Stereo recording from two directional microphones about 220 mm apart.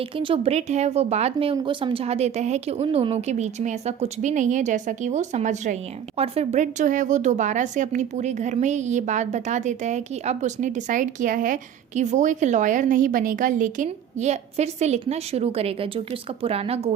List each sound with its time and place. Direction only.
0.2 s speech: 25° right (ahead or behind)